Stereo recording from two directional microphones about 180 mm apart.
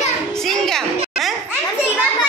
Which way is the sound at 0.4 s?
5° left (ahead or behind).